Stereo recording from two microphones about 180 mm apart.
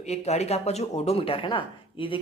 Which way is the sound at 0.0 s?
35° left (ahead or behind).